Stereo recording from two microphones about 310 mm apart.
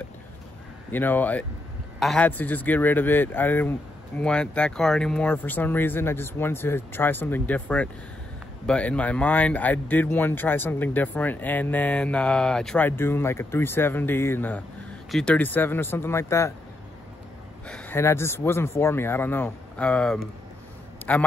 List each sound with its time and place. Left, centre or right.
0.9 s speech: centre
17.6 s speech: centre
21.0 s a sound: centre